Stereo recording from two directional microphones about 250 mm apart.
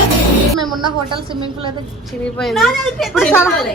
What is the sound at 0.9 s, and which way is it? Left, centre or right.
Speech, centre.